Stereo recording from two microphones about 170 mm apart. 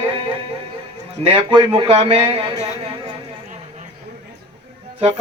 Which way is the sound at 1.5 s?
30° right (ahead or behind).